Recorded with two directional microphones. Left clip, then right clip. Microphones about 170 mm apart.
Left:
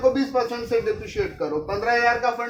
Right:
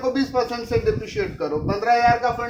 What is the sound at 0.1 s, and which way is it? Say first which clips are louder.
A man's voice: right 1 dB; 40° right (ahead or behind).